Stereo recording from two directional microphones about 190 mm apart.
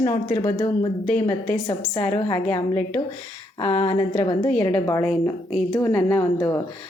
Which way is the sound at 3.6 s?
25° left (ahead or behind).